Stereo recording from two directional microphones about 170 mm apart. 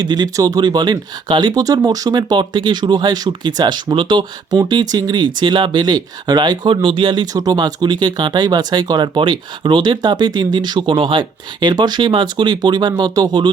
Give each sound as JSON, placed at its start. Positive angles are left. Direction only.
{"t": 0.0, "sound": "speech", "side_deg": -25}